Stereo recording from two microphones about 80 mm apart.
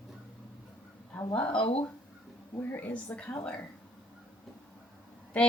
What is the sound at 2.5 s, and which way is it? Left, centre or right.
Speech, left.